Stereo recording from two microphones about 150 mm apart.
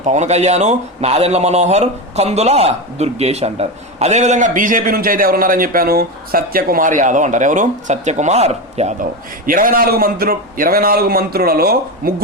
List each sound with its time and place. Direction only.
0.0 s speech: 50° right (ahead or behind)
9.5 s a man's voice: 70° right (ahead or behind)